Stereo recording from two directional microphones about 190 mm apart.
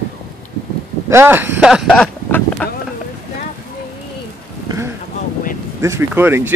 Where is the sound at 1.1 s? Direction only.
10° right (ahead or behind); by 2.7 s 5° left (ahead or behind).